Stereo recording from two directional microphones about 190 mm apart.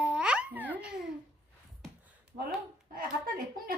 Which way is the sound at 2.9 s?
50° right (ahead or behind).